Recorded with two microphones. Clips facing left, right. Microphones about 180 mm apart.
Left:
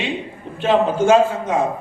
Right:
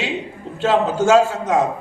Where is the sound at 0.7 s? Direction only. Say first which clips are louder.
Left 1 dB; 80° right.